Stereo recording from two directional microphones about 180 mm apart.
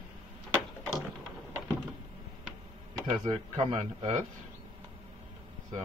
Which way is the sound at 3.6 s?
40° right (ahead or behind).